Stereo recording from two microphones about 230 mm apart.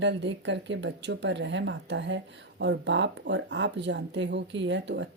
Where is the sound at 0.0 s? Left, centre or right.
Right.